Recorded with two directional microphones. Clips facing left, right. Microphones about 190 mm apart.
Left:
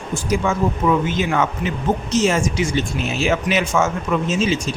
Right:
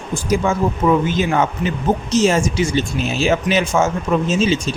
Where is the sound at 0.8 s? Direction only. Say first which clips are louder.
Right 3 dB; 40° right (ahead or behind).